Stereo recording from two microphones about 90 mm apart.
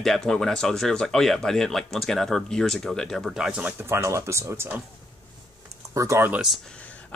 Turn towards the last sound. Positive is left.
turn(degrees=-35)  # may be behind; listen again after turning